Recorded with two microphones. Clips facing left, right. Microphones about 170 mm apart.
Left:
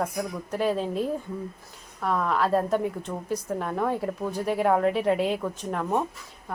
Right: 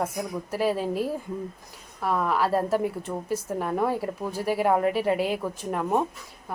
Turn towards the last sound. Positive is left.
turn(degrees=-10)  # may be behind; listen again after turning